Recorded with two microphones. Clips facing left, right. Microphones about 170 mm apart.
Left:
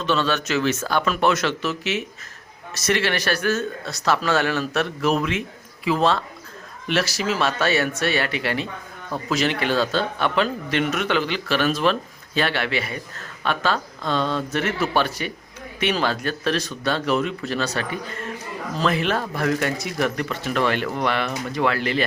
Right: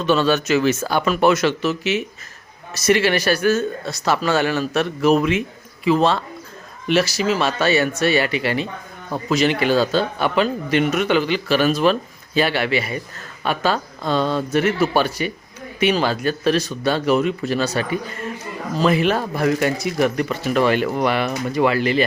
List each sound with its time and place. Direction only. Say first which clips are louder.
0.0 s a man's voice: right 5 dB; 10° right (ahead or behind)